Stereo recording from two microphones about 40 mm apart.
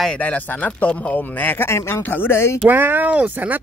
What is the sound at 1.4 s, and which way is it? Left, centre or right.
Speech, left.